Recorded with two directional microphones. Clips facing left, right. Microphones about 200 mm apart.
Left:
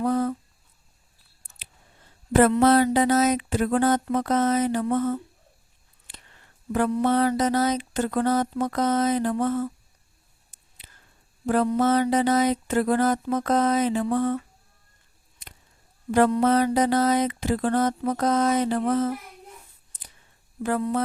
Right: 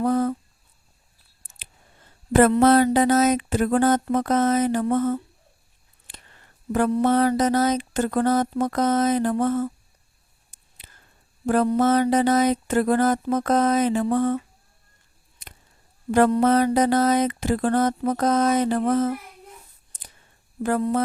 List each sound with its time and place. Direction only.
0.0 s a sound: 45° right (ahead or behind)
2.6 s mantra: 50° right (ahead or behind)
6.7 s mantra: 45° right (ahead or behind)
11.4 s mantra: 45° right (ahead or behind)
16.4 s mantra: 50° right (ahead or behind)
20.6 s mantra: 45° right (ahead or behind)